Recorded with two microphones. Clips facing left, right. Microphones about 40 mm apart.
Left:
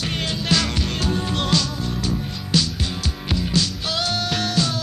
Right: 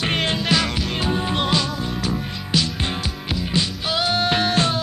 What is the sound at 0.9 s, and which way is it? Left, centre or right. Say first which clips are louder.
Music: right 3 dB; centre.